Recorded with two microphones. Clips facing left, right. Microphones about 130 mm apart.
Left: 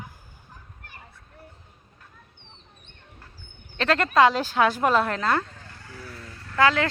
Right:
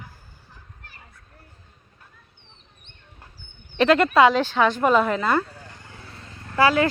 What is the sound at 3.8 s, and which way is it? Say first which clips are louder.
Speech: right 3 dB; 10° right (ahead or behind).